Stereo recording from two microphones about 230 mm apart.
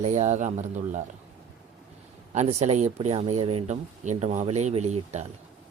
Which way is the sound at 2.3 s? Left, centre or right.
Right.